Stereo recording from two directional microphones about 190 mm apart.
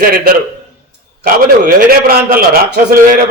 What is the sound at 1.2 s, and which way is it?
A man's voice, 50° right (ahead or behind).